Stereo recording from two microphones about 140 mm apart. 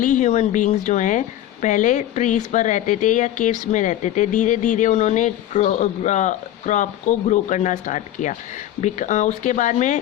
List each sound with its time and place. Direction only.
0.0 s speech: 60° left (ahead or behind)